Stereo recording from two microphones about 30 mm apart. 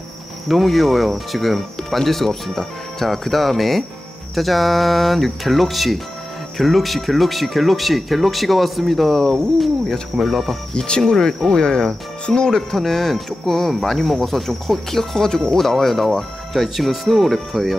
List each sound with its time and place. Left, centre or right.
0.5 s speech: centre
11.5 s speech: left
12.5 s speech: centre
15.1 s speech: centre
15.5 s speech: centre
17.5 s speech: centre